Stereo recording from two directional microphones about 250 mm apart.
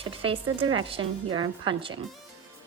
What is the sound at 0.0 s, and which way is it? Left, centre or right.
A woman's voice, right.